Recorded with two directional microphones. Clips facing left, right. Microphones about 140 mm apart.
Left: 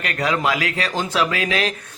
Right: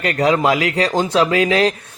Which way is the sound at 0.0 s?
30° right (ahead or behind).